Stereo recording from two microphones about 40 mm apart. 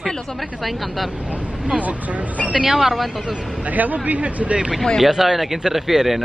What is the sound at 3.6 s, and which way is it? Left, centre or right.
Speech, right.